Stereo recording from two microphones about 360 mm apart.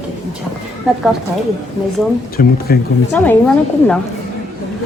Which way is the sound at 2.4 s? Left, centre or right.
Left.